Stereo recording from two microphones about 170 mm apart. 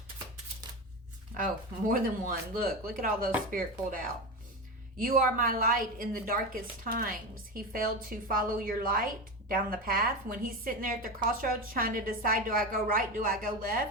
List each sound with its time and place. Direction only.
1.9 s a woman's voice: 60° right (ahead or behind)